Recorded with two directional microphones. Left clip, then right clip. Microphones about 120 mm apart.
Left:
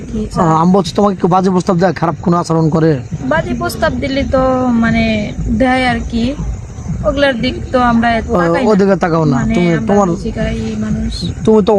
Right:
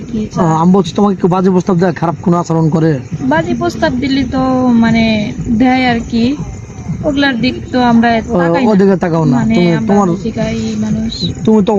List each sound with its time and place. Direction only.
0.3 s a man's voice: 25° left (ahead or behind)
3.2 s a woman's voice: 45° left (ahead or behind)
8.3 s a man's voice: 25° left (ahead or behind)
11.4 s speech: 20° left (ahead or behind)